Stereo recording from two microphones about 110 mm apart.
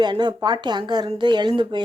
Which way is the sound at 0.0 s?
40° right (ahead or behind).